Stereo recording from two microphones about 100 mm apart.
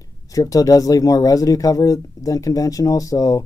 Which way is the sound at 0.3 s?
35° left (ahead or behind).